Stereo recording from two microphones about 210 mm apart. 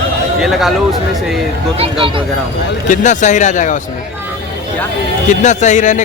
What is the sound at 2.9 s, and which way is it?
Speech, 35° left (ahead or behind).